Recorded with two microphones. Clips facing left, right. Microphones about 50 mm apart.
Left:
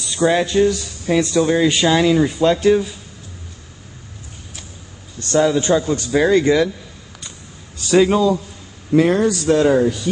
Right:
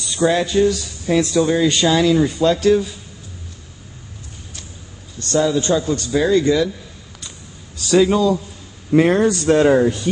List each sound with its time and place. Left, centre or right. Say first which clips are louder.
0.2 s speech: left 1 dB; centre
5.3 s a man's voice: left 2 dB; left
7.9 s speech: left 1 dB; centre
8.9 s a man's voice: right 1 dB; right
9.3 s speech: right 1 dB; right
9.6 s a man's voice: right 1 dB; right